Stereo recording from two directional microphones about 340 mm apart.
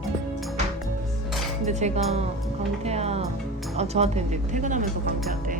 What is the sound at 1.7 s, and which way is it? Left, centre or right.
Dishes, centre.